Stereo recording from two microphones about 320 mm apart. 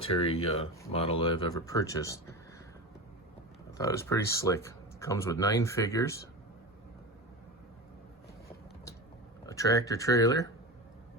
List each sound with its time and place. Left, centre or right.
0.0 s speech: centre
3.8 s speech: centre
9.5 s speech: centre